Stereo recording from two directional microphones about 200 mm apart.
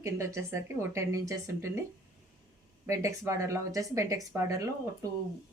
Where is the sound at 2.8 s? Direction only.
15° right (ahead or behind).